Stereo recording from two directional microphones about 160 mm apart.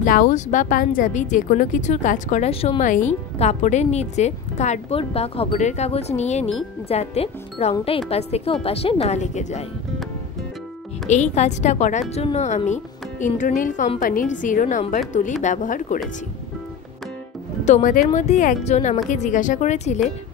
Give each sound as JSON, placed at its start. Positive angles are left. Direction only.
{"t": 0.0, "sound": "speech", "side_deg": 55}
{"t": 2.5, "sound": "a woman's voice", "side_deg": 35}
{"t": 2.8, "sound": "a woman's voice", "side_deg": 50}
{"t": 11.1, "sound": "speech", "side_deg": 45}
{"t": 17.6, "sound": "speech", "side_deg": 50}